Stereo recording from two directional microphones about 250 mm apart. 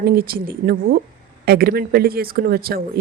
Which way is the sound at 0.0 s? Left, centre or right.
Right.